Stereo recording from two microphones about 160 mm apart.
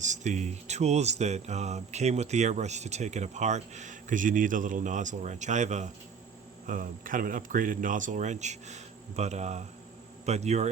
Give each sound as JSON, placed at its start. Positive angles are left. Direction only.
{"t": 0.0, "sound": "speech", "side_deg": -50}
{"t": 6.7, "sound": "speech", "side_deg": -60}